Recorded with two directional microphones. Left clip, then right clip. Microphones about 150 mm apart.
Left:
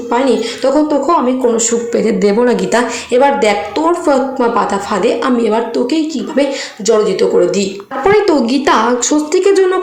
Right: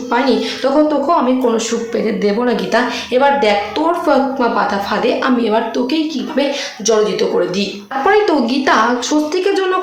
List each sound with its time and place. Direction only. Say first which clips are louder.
0.1 s speech: left 2 dB; 20° left (ahead or behind)